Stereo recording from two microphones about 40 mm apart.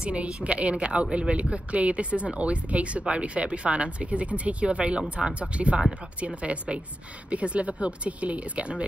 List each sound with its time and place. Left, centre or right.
0.0 s a woman's voice: right